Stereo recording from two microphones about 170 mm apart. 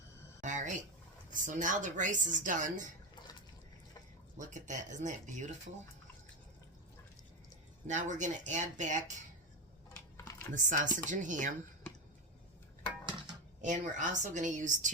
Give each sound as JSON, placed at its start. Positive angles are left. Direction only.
{"t": 0.4, "sound": "a sound", "side_deg": -45}
{"t": 1.3, "sound": "speech", "side_deg": -50}
{"t": 4.4, "sound": "speech", "side_deg": -45}
{"t": 7.9, "sound": "speech", "side_deg": -45}
{"t": 10.2, "sound": "computer keyboard", "side_deg": 15}
{"t": 10.5, "sound": "speech", "side_deg": -50}
{"t": 13.6, "sound": "speech", "side_deg": -45}